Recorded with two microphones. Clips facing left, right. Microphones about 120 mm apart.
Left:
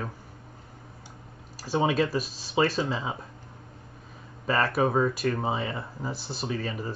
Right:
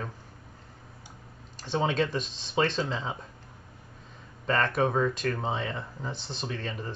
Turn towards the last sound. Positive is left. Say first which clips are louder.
# left 4 dB
turn(degrees=10)  # may be behind; listen again after turning